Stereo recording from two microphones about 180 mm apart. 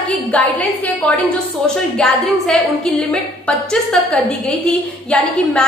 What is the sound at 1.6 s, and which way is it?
A woman's voice, 5° left (ahead or behind).